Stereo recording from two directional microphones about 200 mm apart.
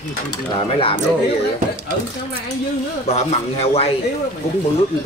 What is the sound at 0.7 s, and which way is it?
Speech, 30° left (ahead or behind).